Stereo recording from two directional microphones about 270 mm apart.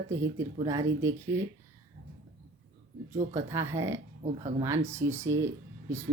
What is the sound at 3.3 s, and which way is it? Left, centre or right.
Speech, centre.